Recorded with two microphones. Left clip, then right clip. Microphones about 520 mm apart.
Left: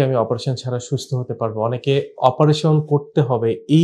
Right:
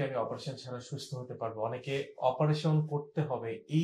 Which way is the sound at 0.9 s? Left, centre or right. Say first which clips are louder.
Left 18 dB; left.